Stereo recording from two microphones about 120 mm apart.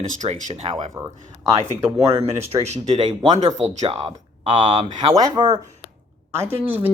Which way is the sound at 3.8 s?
50° right (ahead or behind).